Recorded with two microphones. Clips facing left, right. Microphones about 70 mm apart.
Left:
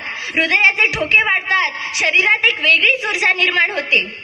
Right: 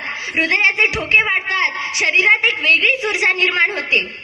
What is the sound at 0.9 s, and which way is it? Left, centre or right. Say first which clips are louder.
A woman's voice: left 1 dB; centre.